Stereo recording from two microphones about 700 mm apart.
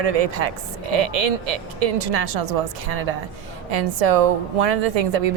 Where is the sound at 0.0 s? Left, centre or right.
Right.